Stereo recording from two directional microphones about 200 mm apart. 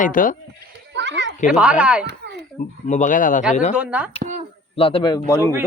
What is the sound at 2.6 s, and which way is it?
Speech, 40° left (ahead or behind).